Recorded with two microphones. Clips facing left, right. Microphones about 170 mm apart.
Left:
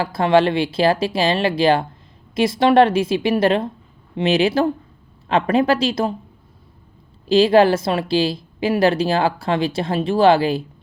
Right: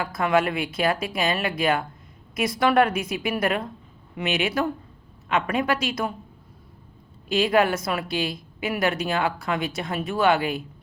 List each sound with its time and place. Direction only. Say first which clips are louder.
0.0 s a woman's voice: left 7 dB; 30° left (ahead or behind)
7.3 s a woman's voice: left 8 dB; 30° left (ahead or behind)